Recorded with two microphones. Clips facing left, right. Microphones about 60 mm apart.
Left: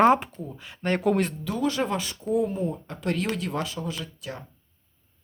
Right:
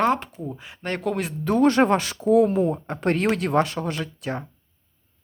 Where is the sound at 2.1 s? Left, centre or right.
Right.